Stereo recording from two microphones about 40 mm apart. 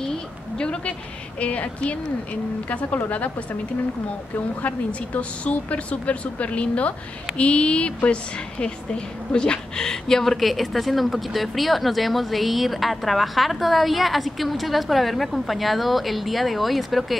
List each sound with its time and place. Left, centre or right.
0.6 s a woman's voice: left
4.6 s a woman's voice: left; by 17.2 s centre